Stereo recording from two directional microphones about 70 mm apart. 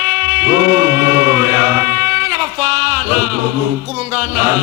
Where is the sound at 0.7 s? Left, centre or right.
Right.